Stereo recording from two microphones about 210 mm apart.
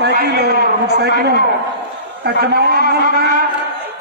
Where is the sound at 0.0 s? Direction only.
50° right (ahead or behind).